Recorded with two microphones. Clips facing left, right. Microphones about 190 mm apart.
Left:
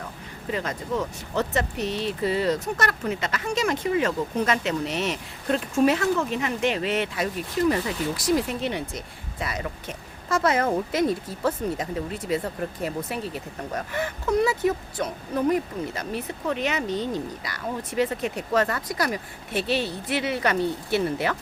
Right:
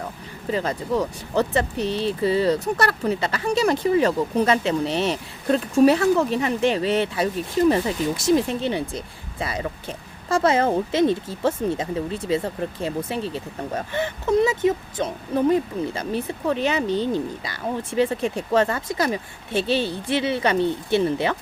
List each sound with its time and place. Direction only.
0.5 s speech: 35° right (ahead or behind)